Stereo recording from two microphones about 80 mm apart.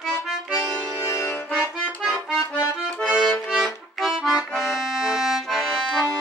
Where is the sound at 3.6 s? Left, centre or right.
Centre.